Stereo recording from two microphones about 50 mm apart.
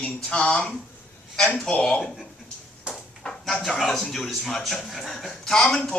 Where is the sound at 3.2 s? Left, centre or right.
Centre.